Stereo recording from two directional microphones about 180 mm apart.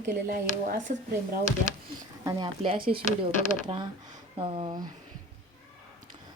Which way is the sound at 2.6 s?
30° right (ahead or behind).